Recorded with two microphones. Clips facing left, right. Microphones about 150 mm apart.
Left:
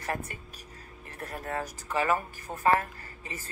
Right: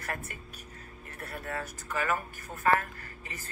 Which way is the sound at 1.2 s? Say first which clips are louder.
Left 3 dB; 30° left (ahead or behind).